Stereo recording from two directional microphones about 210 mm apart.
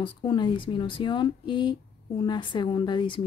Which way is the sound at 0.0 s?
20° left (ahead or behind).